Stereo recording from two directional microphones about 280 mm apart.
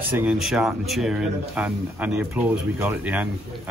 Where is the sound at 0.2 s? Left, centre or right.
Centre.